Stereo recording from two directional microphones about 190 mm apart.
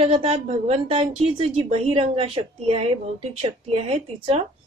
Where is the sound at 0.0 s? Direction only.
30° right (ahead or behind).